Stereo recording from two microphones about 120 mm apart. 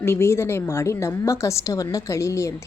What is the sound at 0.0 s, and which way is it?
A woman's voice, 20° left (ahead or behind).